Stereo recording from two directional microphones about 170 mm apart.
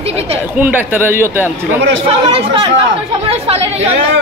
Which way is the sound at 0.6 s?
10° right (ahead or behind).